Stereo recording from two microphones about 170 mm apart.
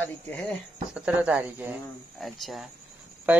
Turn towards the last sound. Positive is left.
turn(degrees=-10)  # may be behind; listen again after turning